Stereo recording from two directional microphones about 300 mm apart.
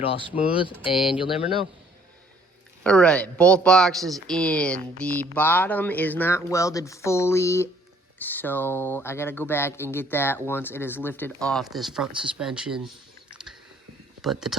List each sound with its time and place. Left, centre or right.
0.0 s speech: centre
0.9 s speech: centre
2.8 s speech: centre
14.2 s speech: centre